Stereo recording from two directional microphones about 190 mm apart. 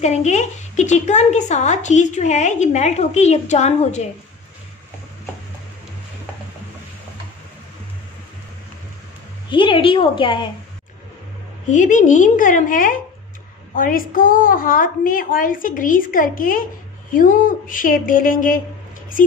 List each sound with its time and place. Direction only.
0.0 s a woman's voice: 35° left (ahead or behind)
9.5 s a woman's voice: 25° left (ahead or behind)
11.6 s a woman's voice: 40° left (ahead or behind)